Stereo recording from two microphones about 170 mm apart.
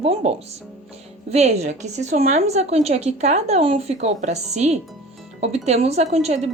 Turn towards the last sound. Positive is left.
turn(degrees=-40)  # may be behind; listen again after turning